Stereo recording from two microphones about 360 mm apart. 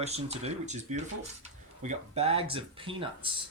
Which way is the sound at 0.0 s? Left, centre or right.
Centre.